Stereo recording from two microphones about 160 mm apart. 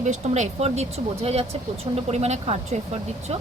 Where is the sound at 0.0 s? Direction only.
45° right (ahead or behind).